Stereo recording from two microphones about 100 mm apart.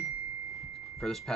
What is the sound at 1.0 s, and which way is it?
Speech, 5° left (ahead or behind).